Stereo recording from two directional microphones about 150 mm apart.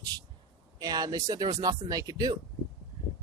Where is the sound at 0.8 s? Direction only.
25° right (ahead or behind).